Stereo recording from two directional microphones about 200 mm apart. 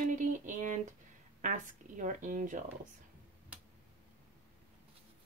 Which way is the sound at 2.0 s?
40° right (ahead or behind).